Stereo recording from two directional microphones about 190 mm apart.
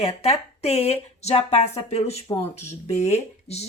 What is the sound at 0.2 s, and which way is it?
Speech, 30° left (ahead or behind).